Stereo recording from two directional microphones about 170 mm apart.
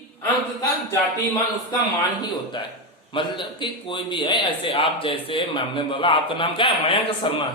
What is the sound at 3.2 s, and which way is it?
A man's voice, 30° left (ahead or behind).